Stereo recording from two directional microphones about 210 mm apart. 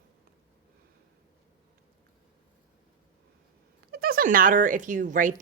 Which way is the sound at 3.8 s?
45° right (ahead or behind).